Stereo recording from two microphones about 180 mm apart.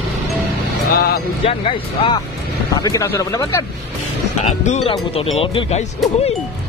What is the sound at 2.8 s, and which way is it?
Speech, 20° left (ahead or behind).